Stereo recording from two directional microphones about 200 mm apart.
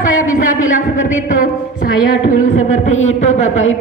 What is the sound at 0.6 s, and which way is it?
Speech, 40° left (ahead or behind).